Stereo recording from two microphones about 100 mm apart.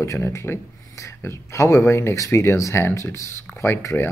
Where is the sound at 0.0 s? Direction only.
30° left (ahead or behind).